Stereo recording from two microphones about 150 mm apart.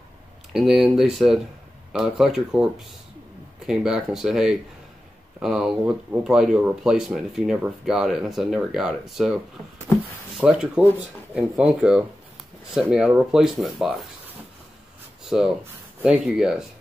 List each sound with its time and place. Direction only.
0.5 s speech: centre (ahead or behind)
9.9 s a sound: 15° left (ahead or behind)
10.3 s speech: 5° right (ahead or behind)
15.2 s speech: 5° right (ahead or behind)